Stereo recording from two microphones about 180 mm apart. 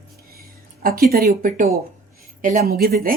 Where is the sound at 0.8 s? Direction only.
55° right (ahead or behind).